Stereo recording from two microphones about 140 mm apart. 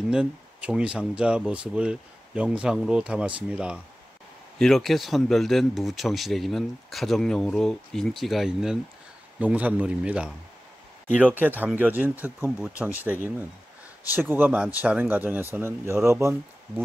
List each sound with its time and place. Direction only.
0.1 s speech: 10° right (ahead or behind)
11.3 s speech: 15° right (ahead or behind)